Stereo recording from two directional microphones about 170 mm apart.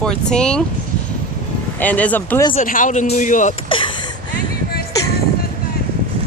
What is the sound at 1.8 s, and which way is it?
Speech, 10° left (ahead or behind).